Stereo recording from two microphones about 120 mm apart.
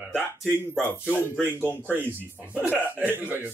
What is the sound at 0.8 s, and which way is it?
Speech, 15° right (ahead or behind).